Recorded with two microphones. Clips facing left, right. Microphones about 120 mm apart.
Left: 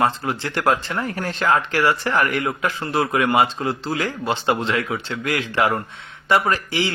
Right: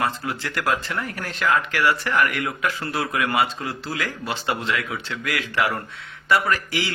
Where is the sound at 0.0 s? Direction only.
30° left (ahead or behind).